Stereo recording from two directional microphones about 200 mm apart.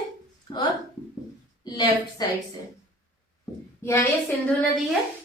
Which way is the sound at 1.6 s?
20° left (ahead or behind).